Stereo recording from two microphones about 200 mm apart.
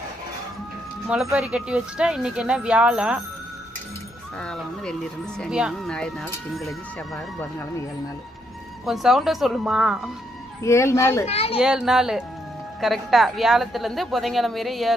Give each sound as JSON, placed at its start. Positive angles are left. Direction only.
{"t": 1.0, "sound": "a woman's voice", "side_deg": -5}
{"t": 4.4, "sound": "a woman's voice", "side_deg": 5}
{"t": 8.9, "sound": "a woman's voice", "side_deg": 0}
{"t": 10.6, "sound": "speech", "side_deg": 15}
{"t": 11.3, "sound": "speech", "side_deg": 30}
{"t": 11.6, "sound": "a woman's voice", "side_deg": -5}